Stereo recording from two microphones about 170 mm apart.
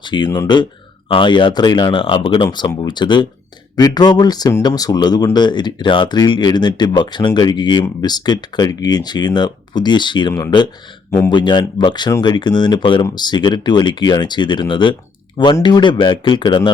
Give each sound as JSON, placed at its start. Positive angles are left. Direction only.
{"t": 0.0, "sound": "speech", "side_deg": 25}